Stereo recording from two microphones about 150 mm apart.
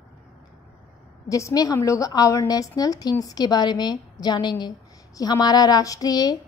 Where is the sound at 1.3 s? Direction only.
20° left (ahead or behind).